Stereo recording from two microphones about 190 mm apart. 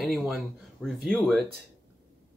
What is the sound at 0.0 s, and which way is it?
Speech, centre (ahead or behind).